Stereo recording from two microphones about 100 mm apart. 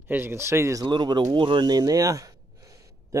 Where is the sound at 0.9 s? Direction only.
50° right (ahead or behind).